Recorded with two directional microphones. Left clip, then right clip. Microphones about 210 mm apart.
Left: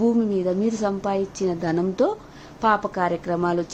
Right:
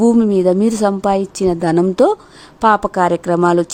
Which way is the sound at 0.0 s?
55° right (ahead or behind).